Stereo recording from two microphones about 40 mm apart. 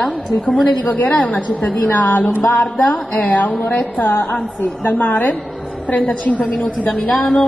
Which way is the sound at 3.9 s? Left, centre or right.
Left.